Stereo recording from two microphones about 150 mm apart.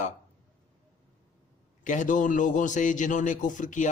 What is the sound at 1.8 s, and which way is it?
Speech, 55° left (ahead or behind).